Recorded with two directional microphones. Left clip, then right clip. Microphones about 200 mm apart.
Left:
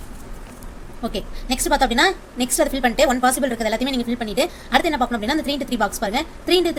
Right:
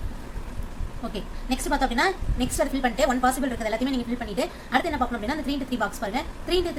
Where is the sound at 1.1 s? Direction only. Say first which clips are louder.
Left 4 dB; 40° left (ahead or behind).